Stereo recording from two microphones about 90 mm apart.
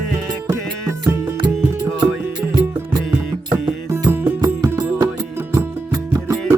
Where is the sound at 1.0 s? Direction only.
55° right (ahead or behind).